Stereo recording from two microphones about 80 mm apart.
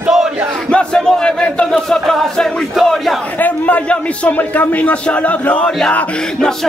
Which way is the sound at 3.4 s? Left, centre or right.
Centre.